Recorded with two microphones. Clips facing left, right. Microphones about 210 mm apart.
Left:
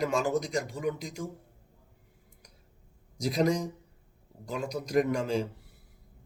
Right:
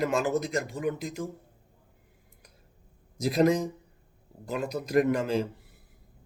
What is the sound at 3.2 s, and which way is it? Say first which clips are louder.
Speech: right 4 dB; centre (ahead or behind).